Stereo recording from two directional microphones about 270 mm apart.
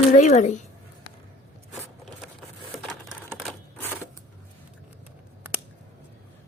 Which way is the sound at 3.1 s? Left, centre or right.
Centre.